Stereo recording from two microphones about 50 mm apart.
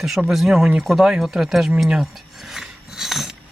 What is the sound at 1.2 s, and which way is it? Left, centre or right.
Filing, centre.